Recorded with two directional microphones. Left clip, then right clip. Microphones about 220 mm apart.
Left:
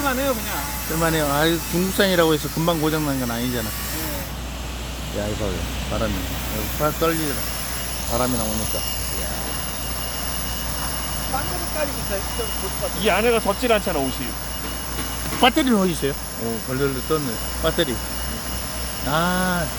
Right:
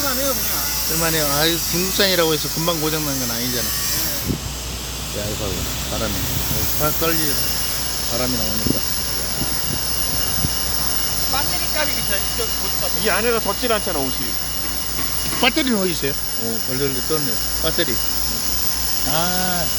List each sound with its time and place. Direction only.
1.0 s speech: 10° left (ahead or behind)
6.8 s speech: 5° left (ahead or behind)
13.1 s speech: 15° left (ahead or behind)
15.4 s speech: 15° left (ahead or behind)
19.1 s speech: 15° left (ahead or behind)